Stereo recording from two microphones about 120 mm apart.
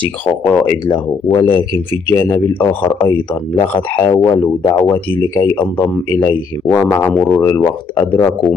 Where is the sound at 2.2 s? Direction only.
20° left (ahead or behind).